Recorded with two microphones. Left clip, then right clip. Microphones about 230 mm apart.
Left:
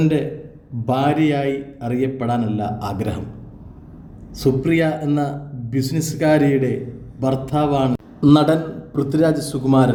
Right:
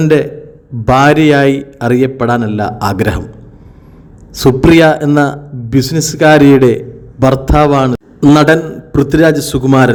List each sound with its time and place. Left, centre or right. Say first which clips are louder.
0.0 s a man's voice: right 10 dB; right
4.4 s a man's voice: right 11 dB; right